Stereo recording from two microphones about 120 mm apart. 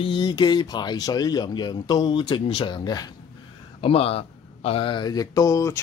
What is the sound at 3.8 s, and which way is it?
Speech, 50° left (ahead or behind).